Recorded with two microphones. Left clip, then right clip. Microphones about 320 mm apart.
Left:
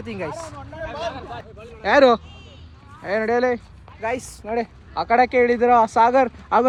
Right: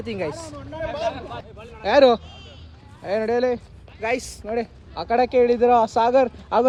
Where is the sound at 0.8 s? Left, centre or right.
Centre.